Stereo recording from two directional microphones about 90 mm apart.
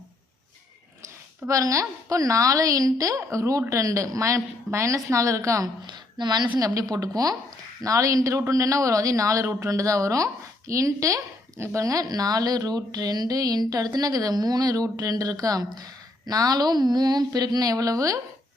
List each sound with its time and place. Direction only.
1.5 s speech: 40° right (ahead or behind)
5.8 s a woman's voice: 55° right (ahead or behind)
6.7 s a woman's voice: 45° right (ahead or behind)